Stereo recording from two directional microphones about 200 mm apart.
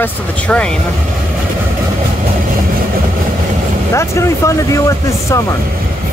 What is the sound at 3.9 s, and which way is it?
Speech, 15° left (ahead or behind).